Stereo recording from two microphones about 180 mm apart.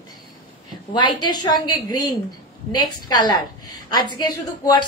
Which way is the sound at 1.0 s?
25° left (ahead or behind).